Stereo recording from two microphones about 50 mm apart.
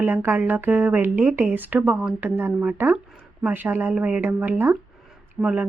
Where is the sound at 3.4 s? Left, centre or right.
Right.